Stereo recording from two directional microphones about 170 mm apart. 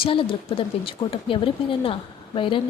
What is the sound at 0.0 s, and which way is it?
A woman's voice, 30° left (ahead or behind).